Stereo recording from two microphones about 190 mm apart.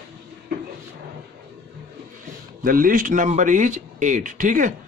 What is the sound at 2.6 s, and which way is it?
A man's voice, 45° right (ahead or behind).